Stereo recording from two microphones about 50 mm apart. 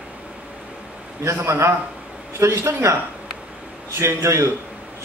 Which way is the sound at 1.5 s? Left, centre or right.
Right.